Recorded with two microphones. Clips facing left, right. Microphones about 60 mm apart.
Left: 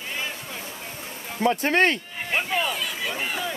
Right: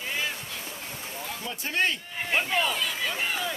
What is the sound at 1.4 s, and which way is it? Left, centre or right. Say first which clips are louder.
Speech: left 9 dB; left.